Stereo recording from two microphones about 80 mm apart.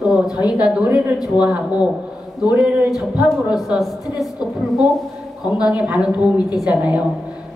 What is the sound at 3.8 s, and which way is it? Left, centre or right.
Speech, centre.